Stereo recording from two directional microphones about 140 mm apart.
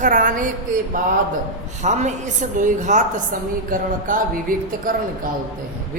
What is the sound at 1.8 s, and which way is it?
A woman's voice, 55° right (ahead or behind).